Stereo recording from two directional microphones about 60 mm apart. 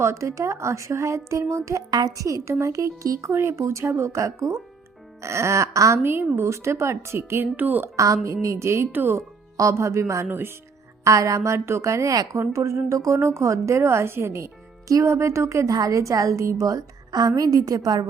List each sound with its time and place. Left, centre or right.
0.0 s speech: right
3.3 s a woman's voice: right
3.6 s speech: right
6.0 s a woman's voice: right
7.5 s speech: right
7.9 s speech: right
8.9 s speech: right
9.6 s speech: right
10.2 s speech: right
11.0 s a woman's voice: right
15.7 s a woman's voice: right
17.2 s a woman's voice: right